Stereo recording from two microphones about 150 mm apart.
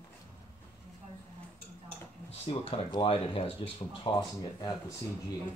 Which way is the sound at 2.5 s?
40° left (ahead or behind).